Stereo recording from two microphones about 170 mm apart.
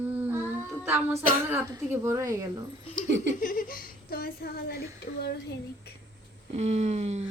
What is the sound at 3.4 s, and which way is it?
A woman's voice, 55° left (ahead or behind).